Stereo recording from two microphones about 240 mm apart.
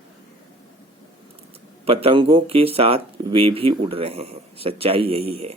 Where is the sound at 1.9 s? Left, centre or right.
Right.